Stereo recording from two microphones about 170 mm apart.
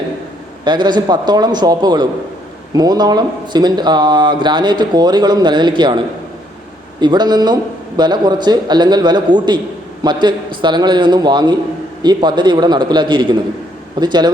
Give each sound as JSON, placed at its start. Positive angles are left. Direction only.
{"t": 0.6, "sound": "speech", "side_deg": -25}
{"t": 7.0, "sound": "speech", "side_deg": -25}